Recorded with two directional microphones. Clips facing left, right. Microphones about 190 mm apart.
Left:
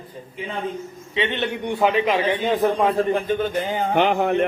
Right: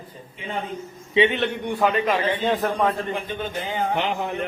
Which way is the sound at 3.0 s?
45° left (ahead or behind).